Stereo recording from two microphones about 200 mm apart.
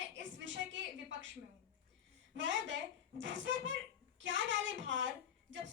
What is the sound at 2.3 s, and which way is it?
A child's voice, 65° right (ahead or behind).